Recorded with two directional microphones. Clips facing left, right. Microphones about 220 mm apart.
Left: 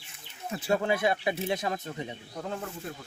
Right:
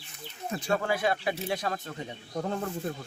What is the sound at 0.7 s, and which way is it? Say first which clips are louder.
A man's voice: left 2 dB; 20° left (ahead or behind).